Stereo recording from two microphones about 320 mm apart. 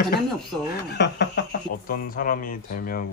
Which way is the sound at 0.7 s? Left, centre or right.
Left.